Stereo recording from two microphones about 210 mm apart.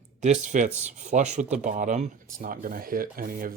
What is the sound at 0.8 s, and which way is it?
Speech, 35° right (ahead or behind).